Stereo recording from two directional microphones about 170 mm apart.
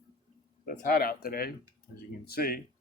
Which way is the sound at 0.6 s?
55° left (ahead or behind).